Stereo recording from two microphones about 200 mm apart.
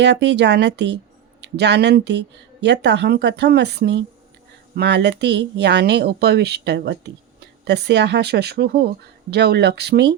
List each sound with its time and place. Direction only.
0.0 s speech: 60° right (ahead or behind)